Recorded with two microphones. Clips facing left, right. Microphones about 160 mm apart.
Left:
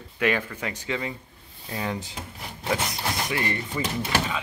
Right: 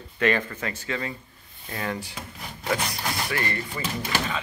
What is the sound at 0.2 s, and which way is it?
Speech, 10° left (ahead or behind).